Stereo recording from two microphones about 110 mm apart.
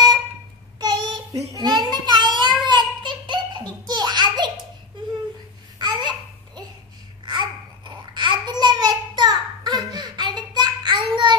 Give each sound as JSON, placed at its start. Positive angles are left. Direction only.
{"t": 0.7, "sound": "child singing", "side_deg": -40}
{"t": 2.6, "sound": "a sound", "side_deg": -45}
{"t": 5.8, "sound": "babbling", "side_deg": -40}